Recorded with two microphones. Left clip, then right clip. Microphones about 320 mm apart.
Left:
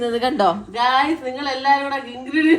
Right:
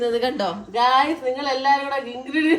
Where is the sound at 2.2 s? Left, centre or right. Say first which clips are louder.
Left 4 dB; left.